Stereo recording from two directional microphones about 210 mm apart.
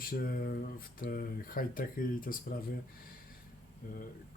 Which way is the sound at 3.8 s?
40° left (ahead or behind).